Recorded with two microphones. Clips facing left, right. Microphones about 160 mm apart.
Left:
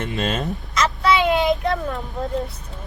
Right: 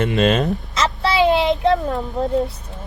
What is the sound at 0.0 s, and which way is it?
Speech, 85° right.